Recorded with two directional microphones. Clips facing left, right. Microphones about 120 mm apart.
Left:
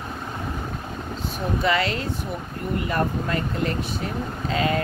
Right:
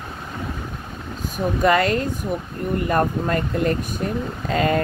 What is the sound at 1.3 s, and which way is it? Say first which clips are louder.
Speech: right 5 dB; 50° right (ahead or behind).